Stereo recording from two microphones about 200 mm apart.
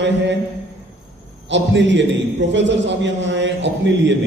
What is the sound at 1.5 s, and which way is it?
A man's voice, 65° right (ahead or behind).